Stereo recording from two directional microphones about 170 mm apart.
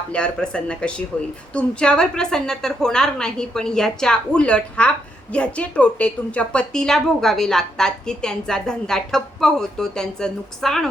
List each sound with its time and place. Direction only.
0.1 s a woman's voice: 5° left (ahead or behind)